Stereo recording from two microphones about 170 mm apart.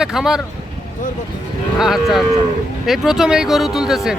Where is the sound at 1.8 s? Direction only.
Centre (ahead or behind).